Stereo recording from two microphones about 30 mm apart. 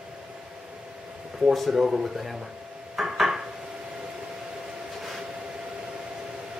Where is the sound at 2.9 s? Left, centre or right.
Centre.